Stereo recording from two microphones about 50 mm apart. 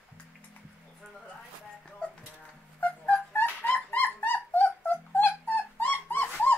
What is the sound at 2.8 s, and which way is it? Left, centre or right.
Dog, left.